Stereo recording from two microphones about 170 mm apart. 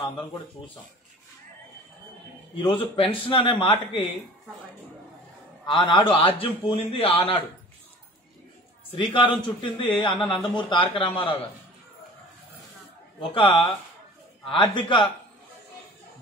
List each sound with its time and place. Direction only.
2.5 s a man's voice: 30° left (ahead or behind)
5.7 s a man's voice: 30° left (ahead or behind)
8.9 s a man's voice: 30° left (ahead or behind)
13.2 s a man's voice: 30° left (ahead or behind)